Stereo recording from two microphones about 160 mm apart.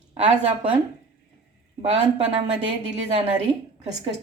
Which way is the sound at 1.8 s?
40° right (ahead or behind).